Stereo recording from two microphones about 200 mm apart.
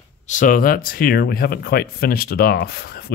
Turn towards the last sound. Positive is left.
turn(degrees=50)  # may be behind; listen again after turning